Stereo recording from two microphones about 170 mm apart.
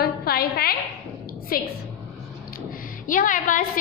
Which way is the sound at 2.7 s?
55° left (ahead or behind).